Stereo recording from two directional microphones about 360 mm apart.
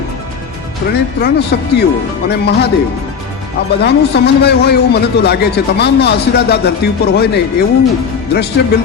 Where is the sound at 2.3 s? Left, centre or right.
Left.